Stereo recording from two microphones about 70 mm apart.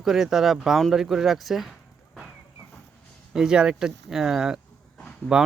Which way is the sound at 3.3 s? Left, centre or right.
Centre.